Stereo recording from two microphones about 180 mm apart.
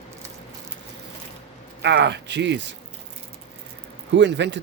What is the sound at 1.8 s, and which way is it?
Speech, 70° right (ahead or behind).